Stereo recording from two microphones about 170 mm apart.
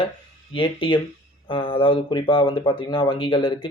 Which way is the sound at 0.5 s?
30° left (ahead or behind).